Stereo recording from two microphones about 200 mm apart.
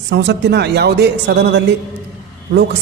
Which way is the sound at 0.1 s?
60° right (ahead or behind).